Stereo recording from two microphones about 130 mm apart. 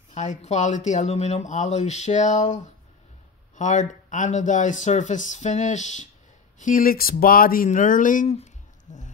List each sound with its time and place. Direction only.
0.1 s speech: 65° left (ahead or behind)
6.6 s speech: 90° left
8.9 s speech: 70° left (ahead or behind)